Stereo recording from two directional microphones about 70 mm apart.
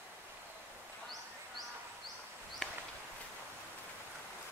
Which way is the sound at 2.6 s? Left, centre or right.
Centre.